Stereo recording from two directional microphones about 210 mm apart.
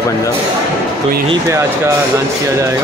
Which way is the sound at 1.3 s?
15° right (ahead or behind).